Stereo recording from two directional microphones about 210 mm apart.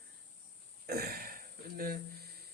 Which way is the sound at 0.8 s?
50° right (ahead or behind).